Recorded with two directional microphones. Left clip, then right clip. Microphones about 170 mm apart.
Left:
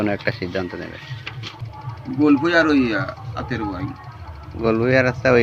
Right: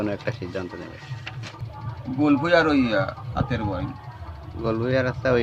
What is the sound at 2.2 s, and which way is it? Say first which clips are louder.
Speech: left 3 dB; 45° right (ahead or behind).